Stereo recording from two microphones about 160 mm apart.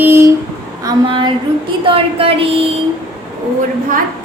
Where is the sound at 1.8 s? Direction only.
35° right (ahead or behind).